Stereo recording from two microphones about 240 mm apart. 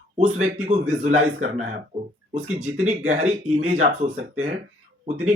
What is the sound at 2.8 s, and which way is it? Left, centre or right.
Speech, right.